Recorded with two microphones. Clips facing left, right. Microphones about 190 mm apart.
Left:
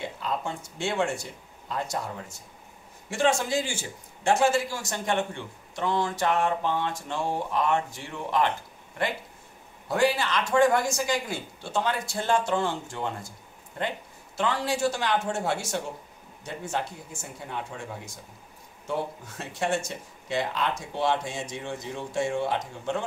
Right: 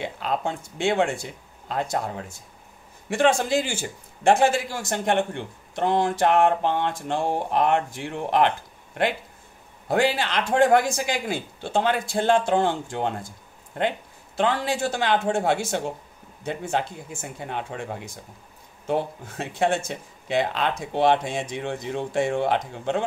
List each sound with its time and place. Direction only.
0.0 s a man's voice: 65° right (ahead or behind)